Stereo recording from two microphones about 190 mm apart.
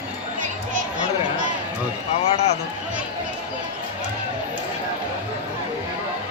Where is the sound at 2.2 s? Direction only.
35° left (ahead or behind).